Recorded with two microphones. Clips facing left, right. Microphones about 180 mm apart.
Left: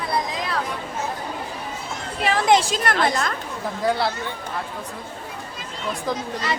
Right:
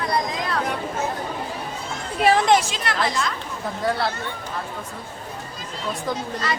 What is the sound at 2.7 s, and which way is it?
Speech, 50° left (ahead or behind).